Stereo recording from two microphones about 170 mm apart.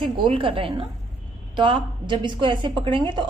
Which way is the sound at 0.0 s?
30° right (ahead or behind).